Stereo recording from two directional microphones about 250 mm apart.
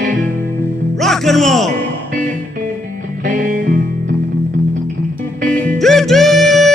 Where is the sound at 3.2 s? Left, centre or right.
Right.